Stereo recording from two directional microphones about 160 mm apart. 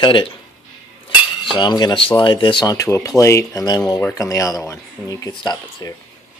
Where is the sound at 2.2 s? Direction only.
30° left (ahead or behind).